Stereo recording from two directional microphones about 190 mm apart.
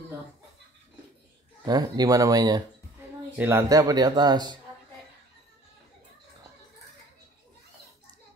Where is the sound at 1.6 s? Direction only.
20° right (ahead or behind).